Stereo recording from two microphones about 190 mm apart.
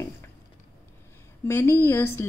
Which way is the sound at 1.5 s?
10° left (ahead or behind).